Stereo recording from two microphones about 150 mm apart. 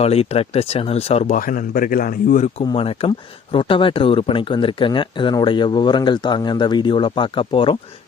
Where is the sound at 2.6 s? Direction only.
35° left (ahead or behind).